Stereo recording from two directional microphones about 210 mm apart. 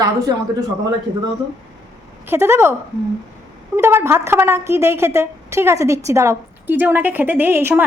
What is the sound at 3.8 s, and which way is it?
A woman's voice, 10° right (ahead or behind).